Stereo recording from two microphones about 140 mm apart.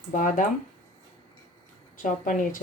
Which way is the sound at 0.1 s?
70° left (ahead or behind).